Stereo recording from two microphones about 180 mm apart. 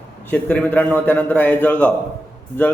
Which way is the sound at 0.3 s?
5° left (ahead or behind).